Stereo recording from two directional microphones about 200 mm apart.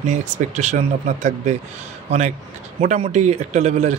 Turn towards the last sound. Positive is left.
turn(degrees=-35)  # may be behind; listen again after turning